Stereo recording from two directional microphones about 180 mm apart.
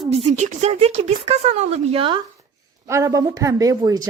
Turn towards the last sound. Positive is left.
turn(degrees=-20)  # may be behind; listen again after turning